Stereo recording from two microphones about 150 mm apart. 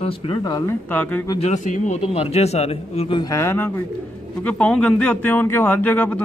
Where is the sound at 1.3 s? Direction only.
50° left (ahead or behind).